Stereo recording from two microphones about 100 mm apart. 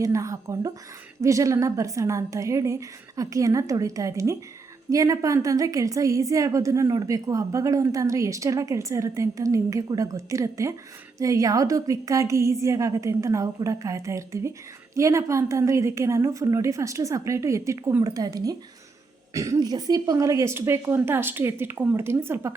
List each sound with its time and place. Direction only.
0.0 s a woman's voice: 35° right (ahead or behind)